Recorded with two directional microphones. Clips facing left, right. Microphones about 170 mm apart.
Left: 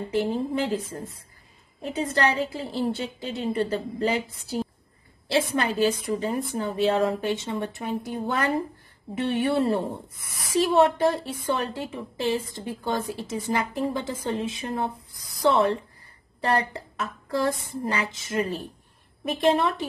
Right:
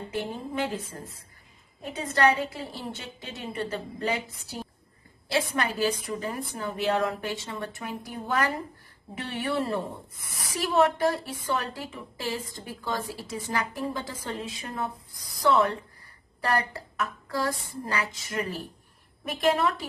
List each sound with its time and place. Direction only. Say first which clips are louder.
0.1 s a woman's voice: left 8 dB; 30° left (ahead or behind)
5.3 s a woman's voice: left 4 dB; 25° left (ahead or behind)